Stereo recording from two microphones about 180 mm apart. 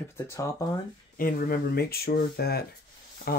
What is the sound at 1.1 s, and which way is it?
Speech, 50° left (ahead or behind).